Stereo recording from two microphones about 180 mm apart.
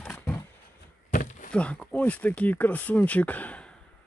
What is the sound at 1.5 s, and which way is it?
Speech, 5° left (ahead or behind).